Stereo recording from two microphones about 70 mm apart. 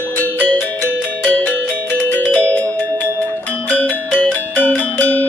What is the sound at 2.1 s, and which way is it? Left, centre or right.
Music, centre.